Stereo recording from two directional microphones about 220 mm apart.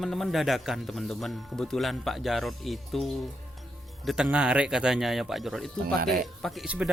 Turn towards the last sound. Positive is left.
turn(degrees=-5)  # may be behind; listen again after turning